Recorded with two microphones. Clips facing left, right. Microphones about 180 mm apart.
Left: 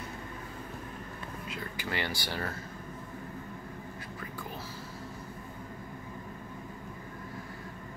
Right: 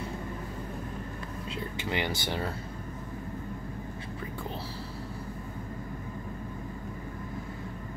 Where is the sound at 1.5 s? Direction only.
20° right (ahead or behind).